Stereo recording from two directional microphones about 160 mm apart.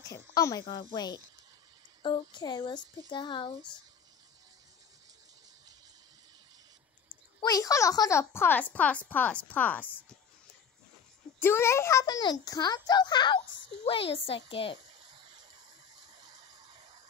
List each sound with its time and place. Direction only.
0.0 s a child's voice: 20° left (ahead or behind)
7.4 s speech: 20° left (ahead or behind)
11.3 s a child's voice: 15° left (ahead or behind); by 14.8 s 35° left (ahead or behind)
15.0 s a sound: 30° right (ahead or behind)